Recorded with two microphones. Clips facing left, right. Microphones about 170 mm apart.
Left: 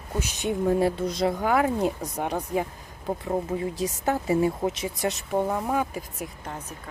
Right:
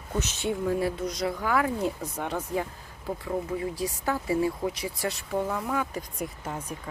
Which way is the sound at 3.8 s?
20° left (ahead or behind).